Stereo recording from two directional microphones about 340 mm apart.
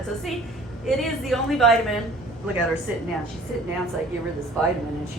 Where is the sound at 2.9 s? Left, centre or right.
Centre.